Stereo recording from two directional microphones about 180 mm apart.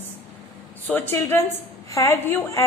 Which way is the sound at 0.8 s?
10° left (ahead or behind).